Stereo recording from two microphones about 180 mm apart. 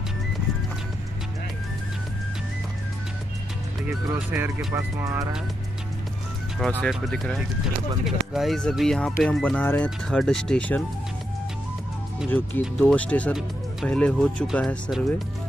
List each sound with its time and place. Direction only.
3.8 s speech: 10° right (ahead or behind)
4.7 s speech: 15° right (ahead or behind)
6.8 s speech: 5° left (ahead or behind)
12.3 s speech: 10° left (ahead or behind)